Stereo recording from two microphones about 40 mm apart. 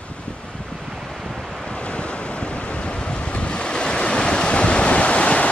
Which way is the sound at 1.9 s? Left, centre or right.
Left.